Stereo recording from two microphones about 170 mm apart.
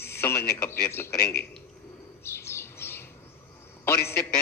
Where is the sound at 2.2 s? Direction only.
15° left (ahead or behind).